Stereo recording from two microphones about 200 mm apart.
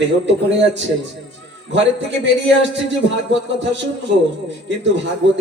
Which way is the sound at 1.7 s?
65° right (ahead or behind).